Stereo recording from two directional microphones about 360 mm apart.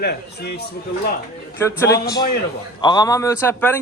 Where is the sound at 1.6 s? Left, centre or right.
Centre.